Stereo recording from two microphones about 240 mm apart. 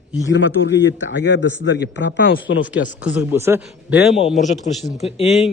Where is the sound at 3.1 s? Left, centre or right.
Centre.